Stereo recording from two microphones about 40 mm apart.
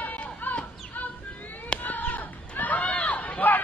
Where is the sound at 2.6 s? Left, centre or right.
Left.